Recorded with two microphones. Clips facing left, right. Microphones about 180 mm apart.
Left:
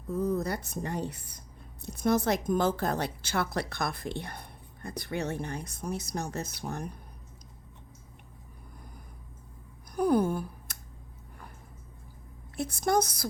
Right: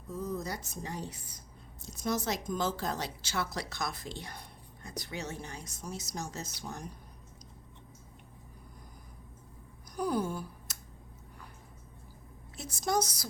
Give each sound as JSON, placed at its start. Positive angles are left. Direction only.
{"t": 0.1, "sound": "a woman's voice", "side_deg": 60}
{"t": 9.9, "sound": "a sound", "side_deg": 55}
{"t": 12.5, "sound": "a woman's voice", "side_deg": 55}